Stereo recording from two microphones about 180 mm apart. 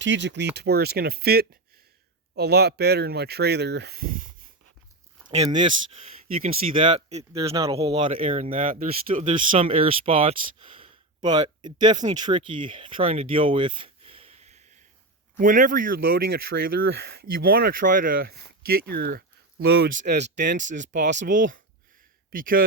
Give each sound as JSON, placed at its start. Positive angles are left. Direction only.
{"t": 0.0, "sound": "speech", "side_deg": -85}
{"t": 0.5, "sound": "speech", "side_deg": -65}
{"t": 5.2, "sound": "a sound", "side_deg": 5}
{"t": 6.8, "sound": "speech", "side_deg": -35}
{"t": 7.3, "sound": "speech", "side_deg": -20}
{"t": 8.2, "sound": "speech", "side_deg": -45}
{"t": 9.5, "sound": "speech", "side_deg": -35}
{"t": 19.9, "sound": "speech", "side_deg": -45}